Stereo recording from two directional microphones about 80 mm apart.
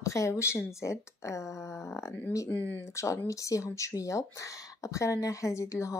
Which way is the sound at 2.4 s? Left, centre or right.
Left.